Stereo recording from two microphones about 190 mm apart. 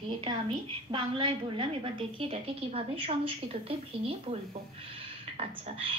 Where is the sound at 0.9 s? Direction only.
30° right (ahead or behind).